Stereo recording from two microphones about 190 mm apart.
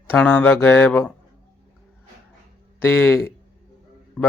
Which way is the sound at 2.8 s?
10° left (ahead or behind).